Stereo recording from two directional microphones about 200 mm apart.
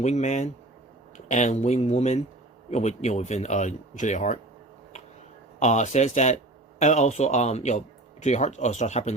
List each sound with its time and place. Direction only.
0.0 s speech: 35° left (ahead or behind)
5.5 s speech: 35° left (ahead or behind)